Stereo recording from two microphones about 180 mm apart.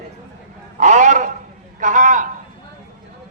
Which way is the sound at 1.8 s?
45° right (ahead or behind).